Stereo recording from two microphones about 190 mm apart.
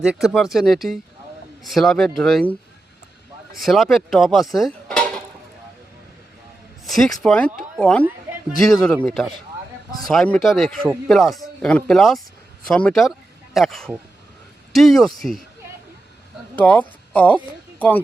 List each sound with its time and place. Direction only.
0.0 s speech: 5° right (ahead or behind)
3.6 s speech: centre (ahead or behind)
6.8 s speech: centre (ahead or behind)
9.0 s speech: centre (ahead or behind)
16.6 s speech: 10° left (ahead or behind)